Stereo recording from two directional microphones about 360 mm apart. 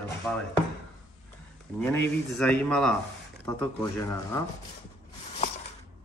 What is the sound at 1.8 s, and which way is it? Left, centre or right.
Speech, centre.